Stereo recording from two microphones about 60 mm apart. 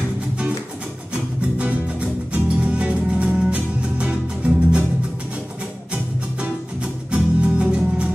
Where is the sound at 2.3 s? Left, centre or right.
Right.